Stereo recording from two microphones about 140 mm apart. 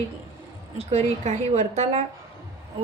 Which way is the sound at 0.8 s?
50° right (ahead or behind).